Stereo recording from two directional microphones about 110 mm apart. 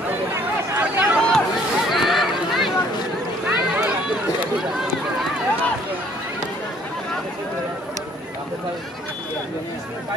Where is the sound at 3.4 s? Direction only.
10° right (ahead or behind).